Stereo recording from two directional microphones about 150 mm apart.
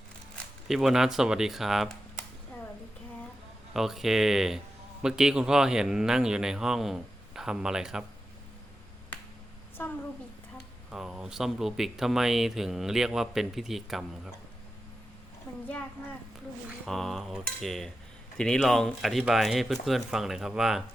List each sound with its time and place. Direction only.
0.7 s speech: centre (ahead or behind)
3.8 s speech: centre (ahead or behind)
9.8 s a sound: 15° left (ahead or behind)
10.9 s speech: 5° right (ahead or behind)
16.8 s speech: centre (ahead or behind)